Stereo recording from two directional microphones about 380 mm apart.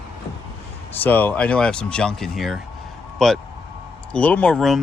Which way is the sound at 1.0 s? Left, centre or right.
Centre.